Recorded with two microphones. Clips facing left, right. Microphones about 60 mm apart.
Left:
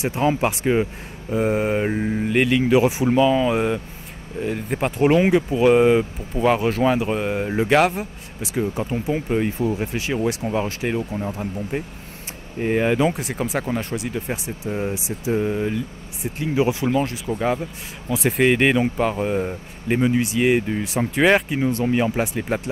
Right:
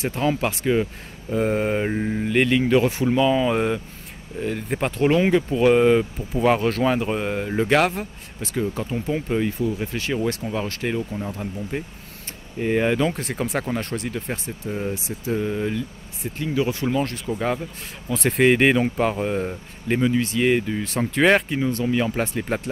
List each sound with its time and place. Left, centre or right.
0.0 s speech: centre
1.3 s speech: centre
16.9 s speech: centre
20.0 s speech: centre
21.5 s speech: centre
22.1 s speech: centre